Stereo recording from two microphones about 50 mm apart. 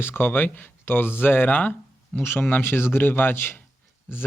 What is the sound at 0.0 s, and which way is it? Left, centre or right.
Speech, left.